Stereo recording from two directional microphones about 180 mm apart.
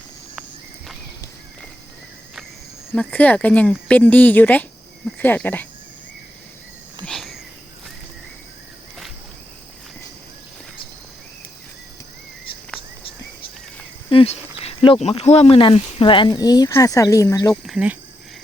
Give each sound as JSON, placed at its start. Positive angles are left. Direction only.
{"t": 2.9, "sound": "speech", "side_deg": 5}
{"t": 7.0, "sound": "a sound", "side_deg": 0}
{"t": 14.1, "sound": "speech", "side_deg": 30}
{"t": 17.7, "sound": "speech", "side_deg": -5}